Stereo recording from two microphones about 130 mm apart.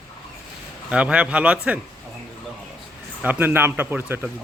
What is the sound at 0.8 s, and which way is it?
Speech, 10° right (ahead or behind).